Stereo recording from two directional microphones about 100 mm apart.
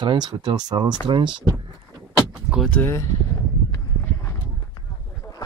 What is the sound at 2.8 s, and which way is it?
Speech, 20° left (ahead or behind).